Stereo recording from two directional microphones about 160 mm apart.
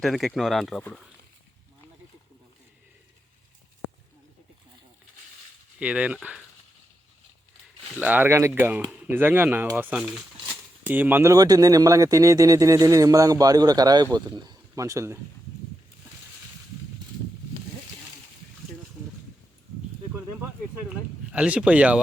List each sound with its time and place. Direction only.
0.0 s speech: centre (ahead or behind)
5.8 s speech: 10° right (ahead or behind)
7.9 s speech: 10° right (ahead or behind)
21.3 s speech: 10° right (ahead or behind)